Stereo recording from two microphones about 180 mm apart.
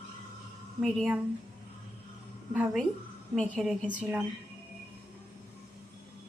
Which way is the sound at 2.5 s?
5° right (ahead or behind).